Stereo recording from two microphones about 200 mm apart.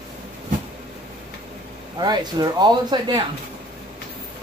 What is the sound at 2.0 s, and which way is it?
Speech, 20° right (ahead or behind).